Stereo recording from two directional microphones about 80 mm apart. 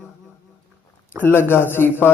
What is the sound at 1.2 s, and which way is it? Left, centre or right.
Speech, left.